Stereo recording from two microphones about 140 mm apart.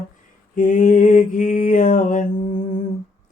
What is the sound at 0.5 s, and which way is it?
Mantra, 70° left (ahead or behind).